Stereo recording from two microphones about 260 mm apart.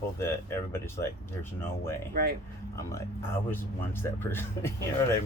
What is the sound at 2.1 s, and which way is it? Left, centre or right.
Speech, right.